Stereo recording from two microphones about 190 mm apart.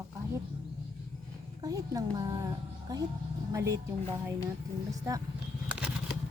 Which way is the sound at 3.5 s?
15° right (ahead or behind).